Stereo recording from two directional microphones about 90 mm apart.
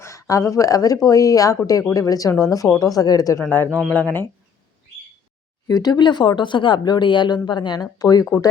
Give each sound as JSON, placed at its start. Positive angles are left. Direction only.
{"t": 0.0, "sound": "speech", "side_deg": 35}
{"t": 3.9, "sound": "speech", "side_deg": 15}
{"t": 5.6, "sound": "speech", "side_deg": 45}